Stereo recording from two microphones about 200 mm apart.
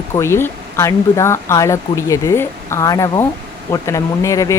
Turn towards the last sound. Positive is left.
turn(degrees=15)  # may be behind; listen again after turning